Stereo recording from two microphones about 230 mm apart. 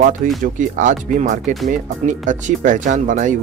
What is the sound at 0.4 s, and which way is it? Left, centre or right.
Speech, right.